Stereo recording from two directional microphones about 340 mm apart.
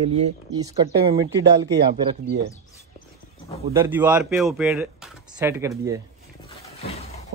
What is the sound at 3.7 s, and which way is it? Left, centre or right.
Speech, centre.